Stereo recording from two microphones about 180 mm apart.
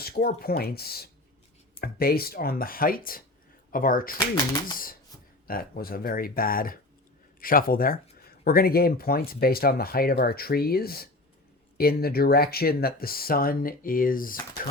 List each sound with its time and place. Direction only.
0.0 s speech: 60° left (ahead or behind)
5.5 s speech: 55° left (ahead or behind)